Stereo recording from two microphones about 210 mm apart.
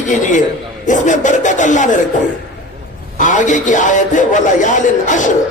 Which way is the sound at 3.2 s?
35° left (ahead or behind).